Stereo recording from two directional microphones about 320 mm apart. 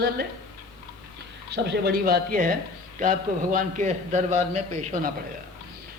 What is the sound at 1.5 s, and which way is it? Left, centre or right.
Speech, right.